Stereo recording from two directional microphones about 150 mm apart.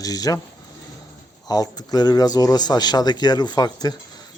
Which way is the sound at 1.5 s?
25° left (ahead or behind).